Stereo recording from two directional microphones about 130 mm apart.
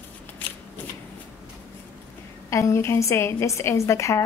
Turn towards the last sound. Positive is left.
turn(degrees=20)  # may be behind; listen again after turning